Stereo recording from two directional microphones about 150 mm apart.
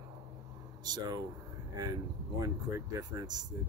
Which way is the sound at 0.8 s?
25° right (ahead or behind).